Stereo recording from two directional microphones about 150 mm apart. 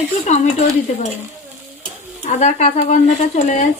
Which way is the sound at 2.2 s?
50° left (ahead or behind).